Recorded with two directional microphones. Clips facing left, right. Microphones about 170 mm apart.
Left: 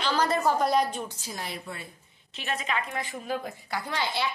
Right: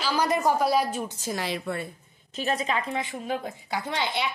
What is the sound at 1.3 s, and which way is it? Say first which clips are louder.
Speech: right 10 dB; 85° right.